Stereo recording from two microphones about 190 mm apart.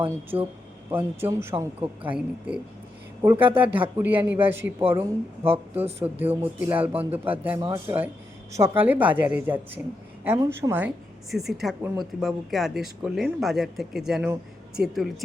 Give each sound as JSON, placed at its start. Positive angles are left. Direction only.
{"t": 0.0, "sound": "speech", "side_deg": -10}
{"t": 3.7, "sound": "speech", "side_deg": -10}